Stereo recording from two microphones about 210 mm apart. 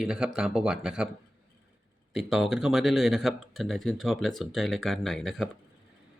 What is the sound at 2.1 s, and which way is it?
Speech, centre (ahead or behind).